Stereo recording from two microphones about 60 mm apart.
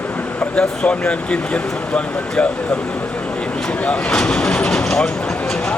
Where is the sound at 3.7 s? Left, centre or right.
Centre.